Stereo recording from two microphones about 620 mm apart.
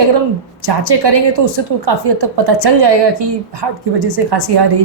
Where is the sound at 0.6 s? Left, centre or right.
Right.